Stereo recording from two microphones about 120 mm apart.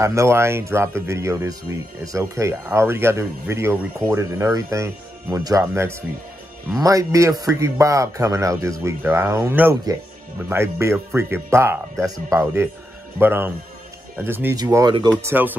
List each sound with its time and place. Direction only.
0.0 s speech: 25° right (ahead or behind)
14.9 s speech: 40° right (ahead or behind)
15.2 s speech: 15° right (ahead or behind)